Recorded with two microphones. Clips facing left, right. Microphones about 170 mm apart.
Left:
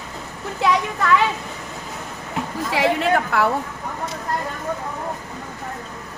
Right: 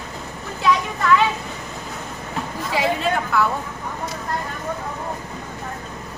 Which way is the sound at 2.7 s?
75° left (ahead or behind).